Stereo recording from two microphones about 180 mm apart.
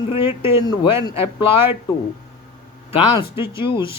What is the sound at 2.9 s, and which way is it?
Speech, 25° left (ahead or behind).